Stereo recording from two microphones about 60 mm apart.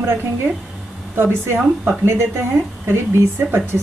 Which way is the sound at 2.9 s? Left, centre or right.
Right.